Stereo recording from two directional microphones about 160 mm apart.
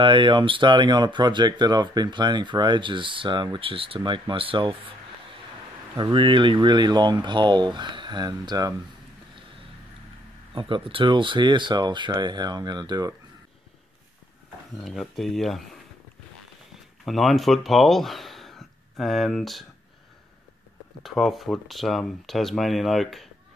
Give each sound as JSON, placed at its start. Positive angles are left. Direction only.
{"t": 0.0, "sound": "speech", "side_deg": -30}
{"t": 5.9, "sound": "speech", "side_deg": -30}
{"t": 10.5, "sound": "speech", "side_deg": -30}
{"t": 14.8, "sound": "speech", "side_deg": 0}
{"t": 17.0, "sound": "speech", "side_deg": 0}
{"t": 21.0, "sound": "speech", "side_deg": 0}